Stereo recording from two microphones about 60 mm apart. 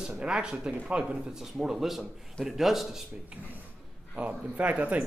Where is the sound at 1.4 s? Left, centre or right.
Centre.